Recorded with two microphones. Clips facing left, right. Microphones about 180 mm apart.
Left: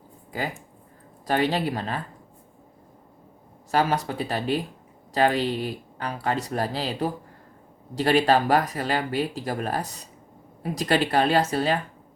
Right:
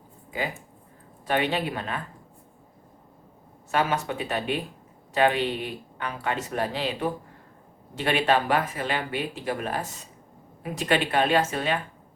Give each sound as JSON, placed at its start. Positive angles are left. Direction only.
{"t": 1.3, "sound": "speech", "side_deg": 40}
{"t": 3.7, "sound": "speech", "side_deg": 35}